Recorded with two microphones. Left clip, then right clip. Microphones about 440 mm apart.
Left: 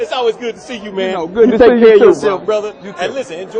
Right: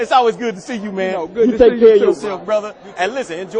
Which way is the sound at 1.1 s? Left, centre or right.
Centre.